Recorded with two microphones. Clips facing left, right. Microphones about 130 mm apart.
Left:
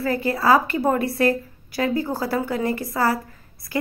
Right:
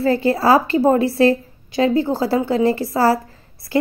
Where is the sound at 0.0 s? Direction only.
30° right (ahead or behind).